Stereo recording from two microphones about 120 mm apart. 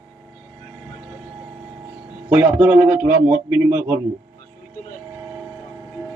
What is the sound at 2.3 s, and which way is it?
A man's voice, 10° right (ahead or behind).